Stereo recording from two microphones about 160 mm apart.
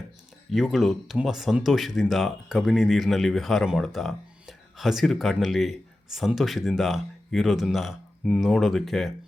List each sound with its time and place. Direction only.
0.5 s speech: centre (ahead or behind)